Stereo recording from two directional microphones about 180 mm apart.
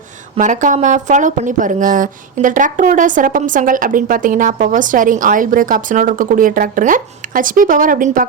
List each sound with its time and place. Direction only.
0.3 s speech: 45° right (ahead or behind)